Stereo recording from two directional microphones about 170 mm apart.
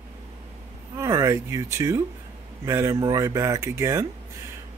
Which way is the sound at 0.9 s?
15° right (ahead or behind).